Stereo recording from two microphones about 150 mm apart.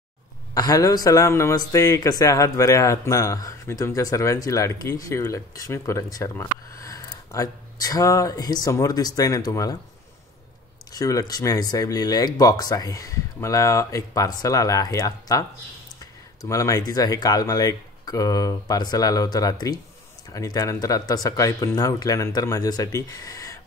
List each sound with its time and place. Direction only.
0.6 s speech: 25° left (ahead or behind)
10.9 s speech: 25° left (ahead or behind)
16.4 s speech: 20° left (ahead or behind)